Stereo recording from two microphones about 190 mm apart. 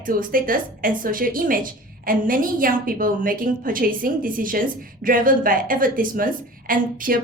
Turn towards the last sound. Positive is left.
turn(degrees=-45)  # may be behind; listen again after turning